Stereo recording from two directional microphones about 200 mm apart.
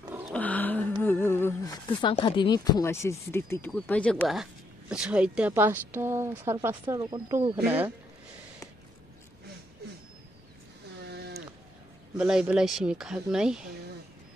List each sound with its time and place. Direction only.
0.3 s a sound: 10° left (ahead or behind)
1.0 s humming: 10° left (ahead or behind)
2.0 s speech: 25° left (ahead or behind); by 7.5 s 20° right (ahead or behind)
7.6 s speech: 10° right (ahead or behind)
11.1 s a sound: 55° right (ahead or behind)
12.2 s speech: 5° right (ahead or behind)